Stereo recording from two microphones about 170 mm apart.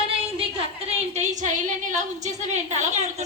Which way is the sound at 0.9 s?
40° right (ahead or behind).